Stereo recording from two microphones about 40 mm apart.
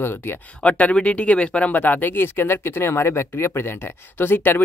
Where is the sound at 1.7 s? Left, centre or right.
Left.